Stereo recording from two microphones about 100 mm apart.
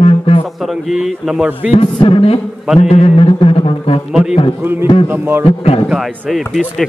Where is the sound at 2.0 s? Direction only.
65° left (ahead or behind).